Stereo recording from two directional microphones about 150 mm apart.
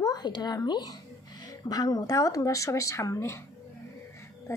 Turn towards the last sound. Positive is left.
turn(degrees=20)  # may be behind; listen again after turning